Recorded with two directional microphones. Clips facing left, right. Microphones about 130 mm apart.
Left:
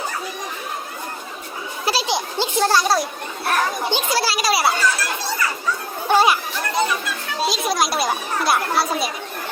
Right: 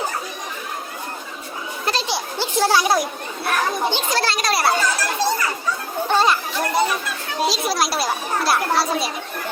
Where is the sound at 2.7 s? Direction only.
15° right (ahead or behind).